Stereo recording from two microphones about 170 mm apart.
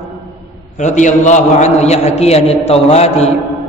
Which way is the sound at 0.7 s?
45° left (ahead or behind).